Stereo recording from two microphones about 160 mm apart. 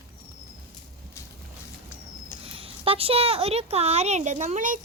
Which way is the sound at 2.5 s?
35° right (ahead or behind).